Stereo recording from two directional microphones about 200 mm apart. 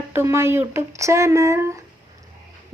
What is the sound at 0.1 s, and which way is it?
Speech, 10° right (ahead or behind).